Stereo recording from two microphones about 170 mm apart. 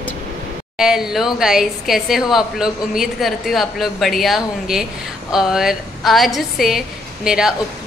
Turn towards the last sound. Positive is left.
turn(degrees=-5)  # may be behind; listen again after turning